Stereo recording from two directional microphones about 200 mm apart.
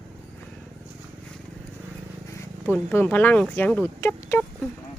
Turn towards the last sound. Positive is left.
turn(degrees=10)  # may be behind; listen again after turning